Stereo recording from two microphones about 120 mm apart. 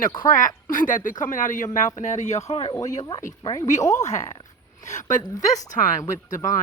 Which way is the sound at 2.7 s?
30° left (ahead or behind).